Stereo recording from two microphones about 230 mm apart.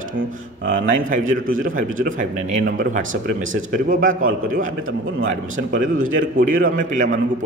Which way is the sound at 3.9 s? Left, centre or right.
Right.